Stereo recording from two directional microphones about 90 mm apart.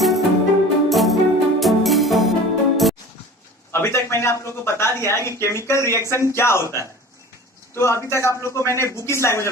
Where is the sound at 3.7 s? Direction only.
30° left (ahead or behind).